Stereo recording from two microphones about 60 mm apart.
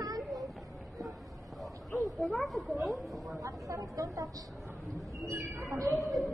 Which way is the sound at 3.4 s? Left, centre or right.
Right.